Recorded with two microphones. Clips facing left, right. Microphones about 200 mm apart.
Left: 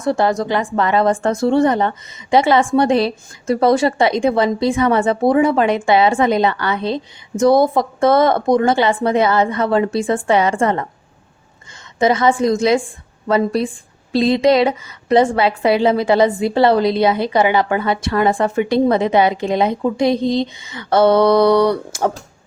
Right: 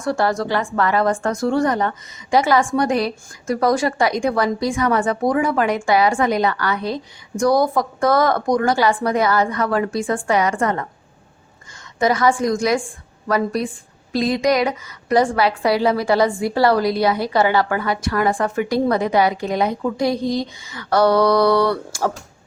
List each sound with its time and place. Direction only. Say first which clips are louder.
0.0 s speech: left 3 dB; 20° left (ahead or behind)
11.9 s speech: left 3 dB; 25° left (ahead or behind)